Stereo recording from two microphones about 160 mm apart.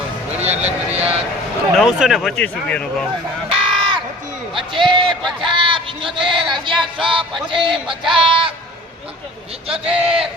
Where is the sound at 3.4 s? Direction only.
35° right (ahead or behind).